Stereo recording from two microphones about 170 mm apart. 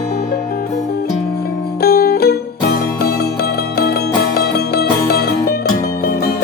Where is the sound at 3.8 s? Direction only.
70° left (ahead or behind).